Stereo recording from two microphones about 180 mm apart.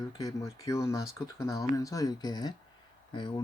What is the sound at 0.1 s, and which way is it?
Speech, 20° left (ahead or behind).